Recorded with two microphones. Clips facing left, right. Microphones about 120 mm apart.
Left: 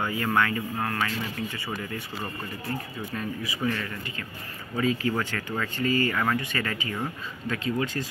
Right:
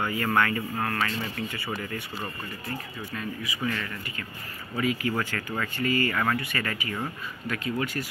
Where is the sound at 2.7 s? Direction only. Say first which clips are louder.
Left 3 dB; 25° left (ahead or behind).